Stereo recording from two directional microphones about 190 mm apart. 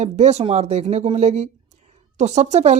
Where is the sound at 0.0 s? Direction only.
35° right (ahead or behind).